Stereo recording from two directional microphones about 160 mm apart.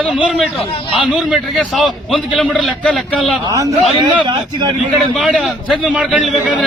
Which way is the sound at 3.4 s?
20° right (ahead or behind).